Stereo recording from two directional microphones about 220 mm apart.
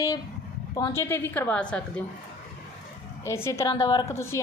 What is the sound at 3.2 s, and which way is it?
A woman's voice, 10° left (ahead or behind).